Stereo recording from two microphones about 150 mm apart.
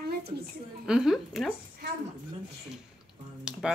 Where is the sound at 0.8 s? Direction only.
5° right (ahead or behind).